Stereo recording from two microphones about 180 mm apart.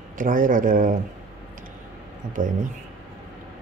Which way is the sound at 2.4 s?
45° right (ahead or behind).